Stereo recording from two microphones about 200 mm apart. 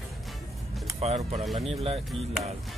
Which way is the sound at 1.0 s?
30° right (ahead or behind).